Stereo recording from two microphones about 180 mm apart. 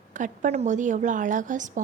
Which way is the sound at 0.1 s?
45° right (ahead or behind).